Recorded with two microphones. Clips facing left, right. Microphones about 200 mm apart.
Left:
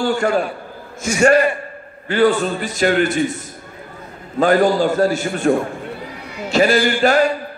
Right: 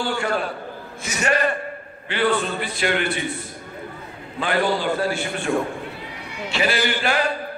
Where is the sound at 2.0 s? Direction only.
40° left (ahead or behind).